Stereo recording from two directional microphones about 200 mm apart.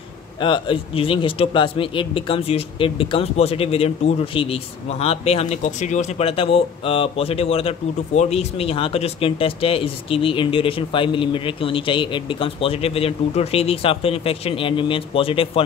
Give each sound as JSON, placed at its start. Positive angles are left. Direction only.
{"t": 0.4, "sound": "speech", "side_deg": 25}